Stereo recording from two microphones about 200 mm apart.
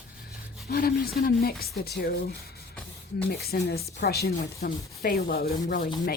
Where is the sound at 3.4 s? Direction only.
50° left (ahead or behind).